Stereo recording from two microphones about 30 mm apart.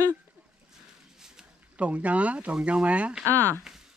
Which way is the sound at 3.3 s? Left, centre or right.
Left.